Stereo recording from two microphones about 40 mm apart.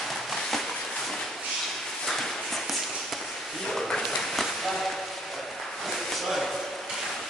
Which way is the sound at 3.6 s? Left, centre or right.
Centre.